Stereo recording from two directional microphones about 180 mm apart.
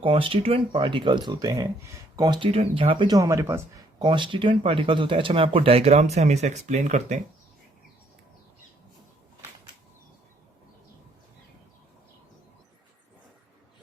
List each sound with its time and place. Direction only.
0.0 s speech: 30° right (ahead or behind)